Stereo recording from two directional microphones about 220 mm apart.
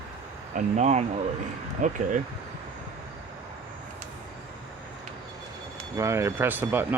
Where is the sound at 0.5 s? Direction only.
30° right (ahead or behind).